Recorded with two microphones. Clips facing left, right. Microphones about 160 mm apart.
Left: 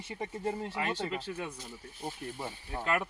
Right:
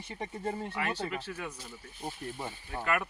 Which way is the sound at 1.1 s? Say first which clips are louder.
Left 1 dB; 25° left (ahead or behind).